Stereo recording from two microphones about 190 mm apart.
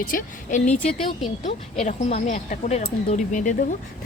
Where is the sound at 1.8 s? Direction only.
35° left (ahead or behind).